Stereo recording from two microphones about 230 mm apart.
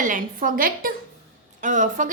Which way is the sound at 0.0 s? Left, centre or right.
Right.